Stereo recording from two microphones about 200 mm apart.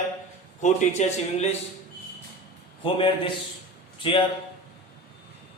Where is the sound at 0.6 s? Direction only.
35° left (ahead or behind).